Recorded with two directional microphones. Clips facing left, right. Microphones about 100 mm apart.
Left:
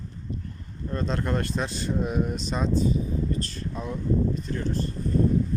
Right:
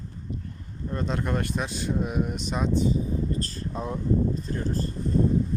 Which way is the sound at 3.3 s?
35° right (ahead or behind).